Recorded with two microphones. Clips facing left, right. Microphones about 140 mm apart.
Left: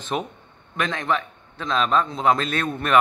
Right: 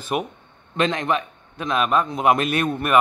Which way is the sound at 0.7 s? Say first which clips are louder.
Right 3 dB; 20° right (ahead or behind).